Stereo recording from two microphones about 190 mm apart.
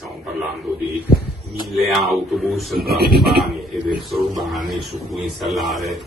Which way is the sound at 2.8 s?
55° right (ahead or behind).